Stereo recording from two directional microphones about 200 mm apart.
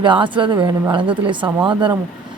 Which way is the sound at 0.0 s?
25° right (ahead or behind).